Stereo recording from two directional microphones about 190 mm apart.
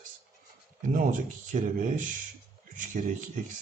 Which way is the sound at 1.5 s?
45° right (ahead or behind).